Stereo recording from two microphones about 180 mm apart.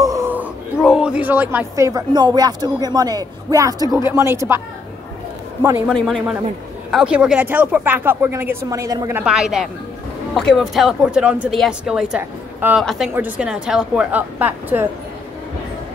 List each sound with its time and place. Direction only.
0.0 s a sound: 15° right (ahead or behind)
0.8 s speech: 5° right (ahead or behind)
5.6 s speech: 15° right (ahead or behind)
5.9 s speech: 5° left (ahead or behind); by 9.2 s 20° right (ahead or behind)
9.2 s speech: centre (ahead or behind)